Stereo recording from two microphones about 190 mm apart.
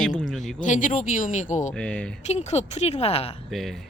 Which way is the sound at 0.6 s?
45° left (ahead or behind).